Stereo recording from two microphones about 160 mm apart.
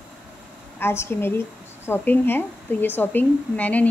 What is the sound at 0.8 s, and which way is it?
Speech, 15° left (ahead or behind).